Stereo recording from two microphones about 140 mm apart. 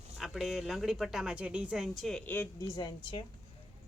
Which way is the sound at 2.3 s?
20° left (ahead or behind).